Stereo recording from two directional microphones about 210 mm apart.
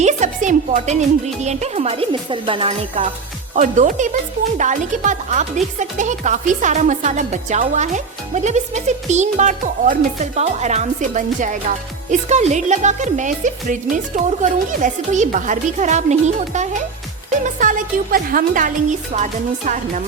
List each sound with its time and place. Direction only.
0.0 s speech: 35° right (ahead or behind)
3.5 s speech: 35° right (ahead or behind)